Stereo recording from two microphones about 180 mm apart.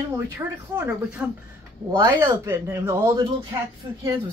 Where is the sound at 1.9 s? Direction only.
20° right (ahead or behind).